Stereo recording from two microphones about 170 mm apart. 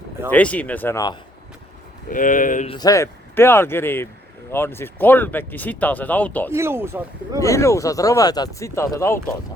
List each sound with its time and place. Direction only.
0.3 s speech: 10° left (ahead or behind)
2.0 s speech: 50° left (ahead or behind)
2.6 s speech: 25° left (ahead or behind)
6.5 s speech: 15° right (ahead or behind)
7.3 s speech: 20° left (ahead or behind)